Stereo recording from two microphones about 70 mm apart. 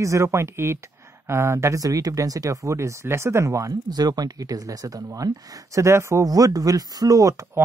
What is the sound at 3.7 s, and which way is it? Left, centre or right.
Speech, right.